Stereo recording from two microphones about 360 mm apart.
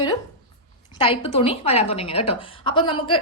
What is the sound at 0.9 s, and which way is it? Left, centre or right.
A woman's voice, centre.